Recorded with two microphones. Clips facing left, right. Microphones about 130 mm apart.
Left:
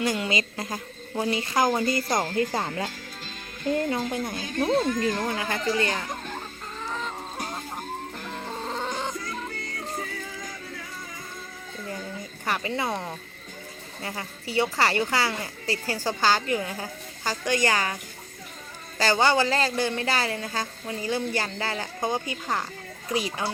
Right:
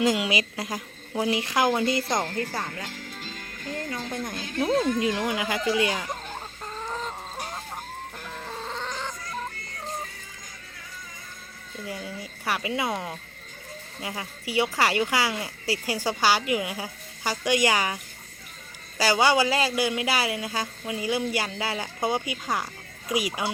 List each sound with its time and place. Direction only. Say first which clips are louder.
0.0 s a woman's voice: right 2 dB; 15° right (ahead or behind)
2.2 s speech: left 4 dB; 10° left (ahead or behind)
4.1 s speech: left 2 dB; 5° left (ahead or behind)
4.8 s a woman's voice: right 1 dB; 5° right (ahead or behind)
8.4 s chicken: left 2 dB; 5° left (ahead or behind)
8.7 s cat: left 4 dB; 15° left (ahead or behind)
12.5 s a woman's voice: even; 5° right (ahead or behind)
18.9 s a woman's voice: even; 10° right (ahead or behind)